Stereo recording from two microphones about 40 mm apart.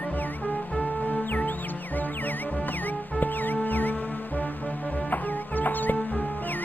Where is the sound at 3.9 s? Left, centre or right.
Left.